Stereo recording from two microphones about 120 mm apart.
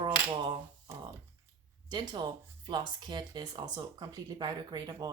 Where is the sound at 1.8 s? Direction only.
35° right (ahead or behind).